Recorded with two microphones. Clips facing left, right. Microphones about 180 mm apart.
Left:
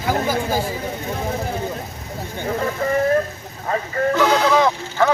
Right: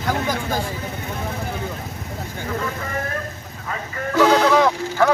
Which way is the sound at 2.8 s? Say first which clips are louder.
Left 10 dB; 30° left (ahead or behind).